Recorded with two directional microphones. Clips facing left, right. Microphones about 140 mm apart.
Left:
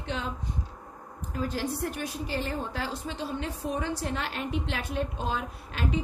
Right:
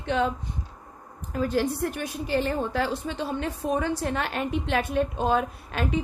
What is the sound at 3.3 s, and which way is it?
A woman's voice, 60° right (ahead or behind).